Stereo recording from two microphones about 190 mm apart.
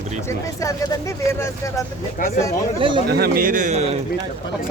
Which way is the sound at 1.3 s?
15° left (ahead or behind).